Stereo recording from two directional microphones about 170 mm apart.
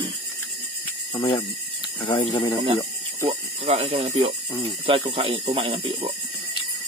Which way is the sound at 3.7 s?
35° right (ahead or behind).